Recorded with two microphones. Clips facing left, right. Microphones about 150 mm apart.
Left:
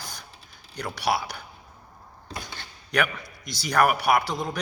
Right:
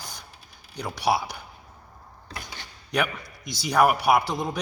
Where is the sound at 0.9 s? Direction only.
20° right (ahead or behind).